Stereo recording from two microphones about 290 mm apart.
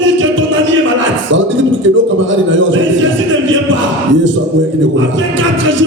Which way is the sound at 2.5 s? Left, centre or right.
Right.